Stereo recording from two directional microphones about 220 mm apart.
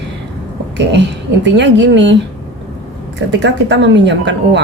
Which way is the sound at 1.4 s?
55° right (ahead or behind).